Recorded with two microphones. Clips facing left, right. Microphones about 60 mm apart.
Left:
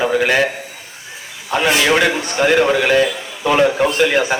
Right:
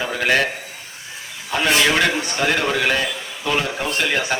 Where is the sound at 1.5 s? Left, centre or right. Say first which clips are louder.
Left 3 dB; centre.